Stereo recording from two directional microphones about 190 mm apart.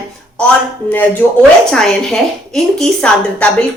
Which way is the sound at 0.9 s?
5° left (ahead or behind).